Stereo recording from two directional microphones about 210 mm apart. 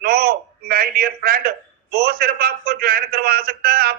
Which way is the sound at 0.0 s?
45° right (ahead or behind).